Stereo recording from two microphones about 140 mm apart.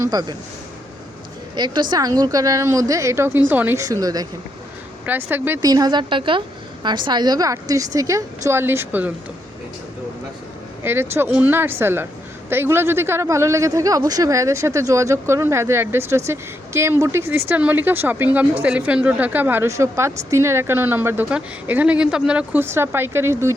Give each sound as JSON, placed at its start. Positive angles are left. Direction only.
{"t": 0.0, "sound": "speech", "side_deg": -30}
{"t": 1.5, "sound": "speech", "side_deg": -30}
{"t": 4.0, "sound": "speech", "side_deg": -25}
{"t": 5.0, "sound": "a woman's voice", "side_deg": -15}
{"t": 5.5, "sound": "speech", "side_deg": -30}
{"t": 10.8, "sound": "a woman's voice", "side_deg": -15}